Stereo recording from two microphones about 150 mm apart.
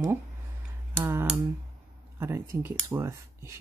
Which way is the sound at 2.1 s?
15° right (ahead or behind).